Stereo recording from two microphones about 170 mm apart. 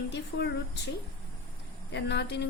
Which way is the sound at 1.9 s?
90° left.